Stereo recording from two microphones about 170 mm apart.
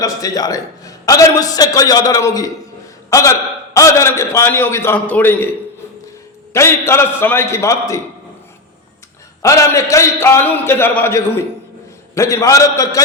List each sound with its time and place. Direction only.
0.0 s a man's voice: 20° left (ahead or behind)
6.5 s a man's voice: 15° left (ahead or behind)
9.4 s a man's voice: 20° left (ahead or behind)